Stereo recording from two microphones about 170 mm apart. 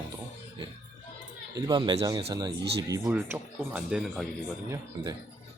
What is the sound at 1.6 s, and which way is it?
Speech, 25° right (ahead or behind).